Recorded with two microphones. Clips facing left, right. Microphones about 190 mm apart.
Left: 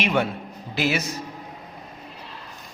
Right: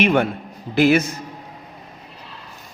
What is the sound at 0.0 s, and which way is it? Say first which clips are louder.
A man's voice: right 6 dB; 55° right (ahead or behind).